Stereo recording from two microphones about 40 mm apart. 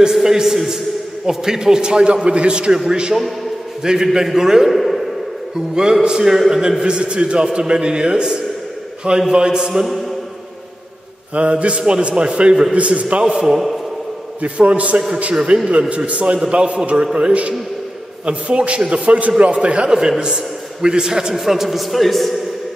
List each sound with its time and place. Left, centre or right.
0.1 s a man's voice: centre; by 2.7 s right
2.7 s a man's voice: centre
4.7 s a sound: centre
6.0 s a man's voice: centre
11.3 s a man's voice: right
13.2 s a man's voice: centre
14.4 s a man's voice: right
19.9 s a man's voice: centre